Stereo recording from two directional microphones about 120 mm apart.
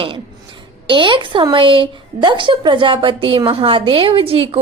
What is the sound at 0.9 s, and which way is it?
A woman's voice, 40° right (ahead or behind).